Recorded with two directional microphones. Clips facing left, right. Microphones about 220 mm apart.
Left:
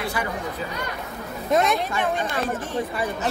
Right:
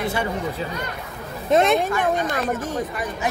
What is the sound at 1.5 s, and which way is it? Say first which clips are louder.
Speech: right 4 dB; 25° right (ahead or behind).